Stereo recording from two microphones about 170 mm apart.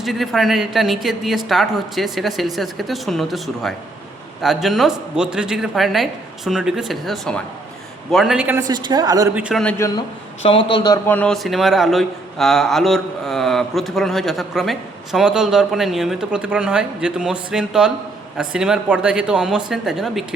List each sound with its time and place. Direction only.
0.0 s speech: centre (ahead or behind)
8.6 s a woman's voice: 25° right (ahead or behind)
9.3 s a man's voice: 10° right (ahead or behind)
9.7 s a man's voice: 15° left (ahead or behind)
10.4 s a man's voice: 35° left (ahead or behind)
11.0 s speech: 10° left (ahead or behind)